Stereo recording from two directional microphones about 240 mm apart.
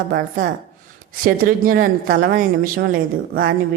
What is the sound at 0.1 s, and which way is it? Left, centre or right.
A woman's voice, right.